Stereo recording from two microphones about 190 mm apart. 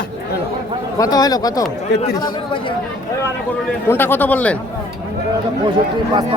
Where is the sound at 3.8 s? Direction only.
10° left (ahead or behind).